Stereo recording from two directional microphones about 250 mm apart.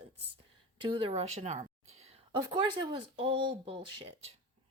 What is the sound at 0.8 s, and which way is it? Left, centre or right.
Speech, centre.